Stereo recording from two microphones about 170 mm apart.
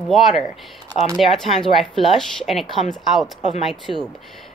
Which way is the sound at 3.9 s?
40° left (ahead or behind).